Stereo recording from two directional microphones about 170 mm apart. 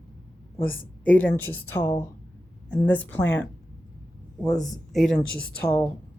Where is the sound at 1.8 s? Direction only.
25° left (ahead or behind).